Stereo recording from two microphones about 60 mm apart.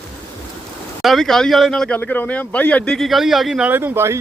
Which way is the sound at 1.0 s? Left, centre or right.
Centre.